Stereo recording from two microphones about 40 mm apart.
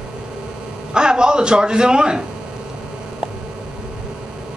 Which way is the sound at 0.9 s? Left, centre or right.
Right.